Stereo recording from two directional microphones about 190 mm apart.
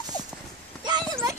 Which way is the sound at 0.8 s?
20° right (ahead or behind).